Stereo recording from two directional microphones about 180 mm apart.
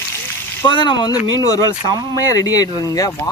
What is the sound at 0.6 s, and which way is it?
Speech, 25° left (ahead or behind).